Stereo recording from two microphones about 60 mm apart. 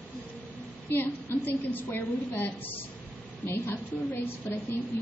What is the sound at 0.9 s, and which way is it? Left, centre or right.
A woman's voice, left.